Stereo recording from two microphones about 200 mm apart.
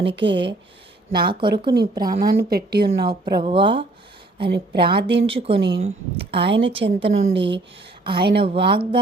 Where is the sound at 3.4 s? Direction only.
25° right (ahead or behind).